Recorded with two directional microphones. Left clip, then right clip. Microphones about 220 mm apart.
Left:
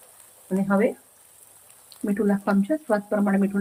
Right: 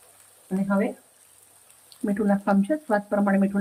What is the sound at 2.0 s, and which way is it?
Speech, centre (ahead or behind).